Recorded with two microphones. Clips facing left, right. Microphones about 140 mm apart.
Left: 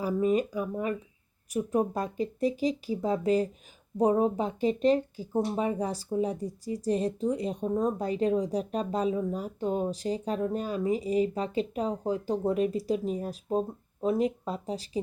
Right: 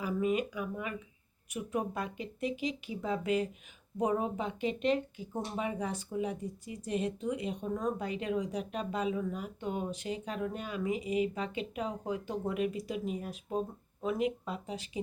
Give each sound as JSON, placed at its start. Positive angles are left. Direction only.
{"t": 0.0, "sound": "speech", "side_deg": 35}